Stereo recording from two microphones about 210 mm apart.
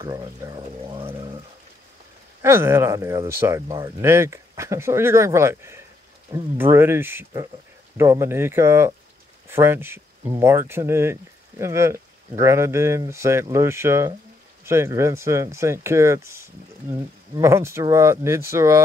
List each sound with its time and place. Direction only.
0.0 s speech: 20° right (ahead or behind)
2.4 s speech: 10° right (ahead or behind)